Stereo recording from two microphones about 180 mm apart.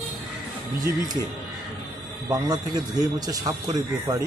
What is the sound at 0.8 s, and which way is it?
Speech, 20° right (ahead or behind).